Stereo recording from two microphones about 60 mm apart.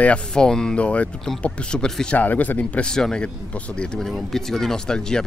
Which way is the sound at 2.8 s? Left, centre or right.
Centre.